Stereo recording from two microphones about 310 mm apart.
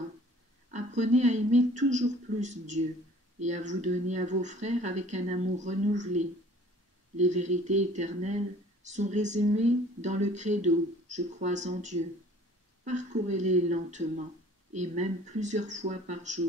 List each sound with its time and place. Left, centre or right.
0.7 s speech: right